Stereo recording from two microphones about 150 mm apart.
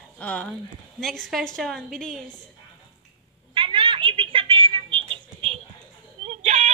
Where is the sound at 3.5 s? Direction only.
35° right (ahead or behind).